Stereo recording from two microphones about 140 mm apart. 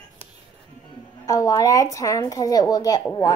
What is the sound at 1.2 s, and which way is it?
A woman's voice, 25° left (ahead or behind).